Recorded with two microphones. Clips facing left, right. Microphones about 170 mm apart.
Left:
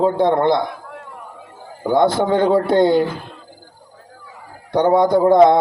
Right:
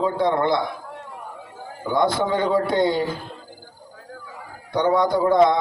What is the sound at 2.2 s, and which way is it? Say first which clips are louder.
Speech: left 5 dB; 60° left (ahead or behind).